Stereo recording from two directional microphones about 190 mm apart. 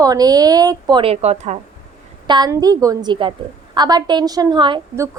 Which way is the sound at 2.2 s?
20° right (ahead or behind).